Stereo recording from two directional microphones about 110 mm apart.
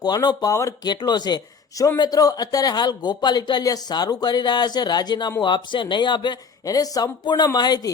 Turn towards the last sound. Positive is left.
turn(degrees=40)  # may be behind; listen again after turning